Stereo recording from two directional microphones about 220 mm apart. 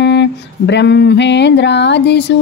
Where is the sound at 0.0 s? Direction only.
50° left (ahead or behind).